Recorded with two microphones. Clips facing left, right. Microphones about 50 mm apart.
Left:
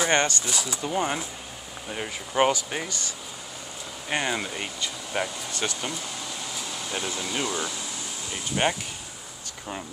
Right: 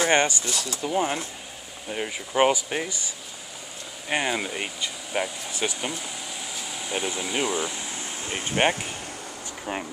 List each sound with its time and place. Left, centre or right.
0.0 s speech: centre
0.5 s speech: centre
4.1 s speech: centre
8.3 s speech: right